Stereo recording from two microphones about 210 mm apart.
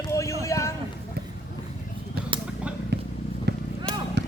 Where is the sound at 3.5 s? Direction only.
55° right (ahead or behind).